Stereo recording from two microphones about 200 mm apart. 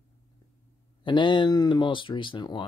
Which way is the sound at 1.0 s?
25° left (ahead or behind).